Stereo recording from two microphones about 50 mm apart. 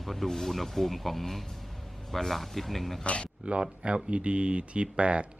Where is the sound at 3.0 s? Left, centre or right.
Left.